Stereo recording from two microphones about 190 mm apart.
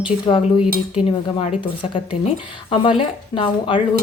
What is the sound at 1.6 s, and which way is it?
Speech, 25° left (ahead or behind).